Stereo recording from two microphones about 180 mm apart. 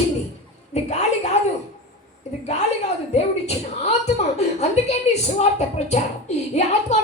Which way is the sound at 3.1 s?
35° left (ahead or behind).